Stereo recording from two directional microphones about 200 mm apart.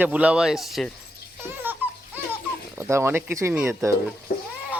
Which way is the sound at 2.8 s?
15° right (ahead or behind).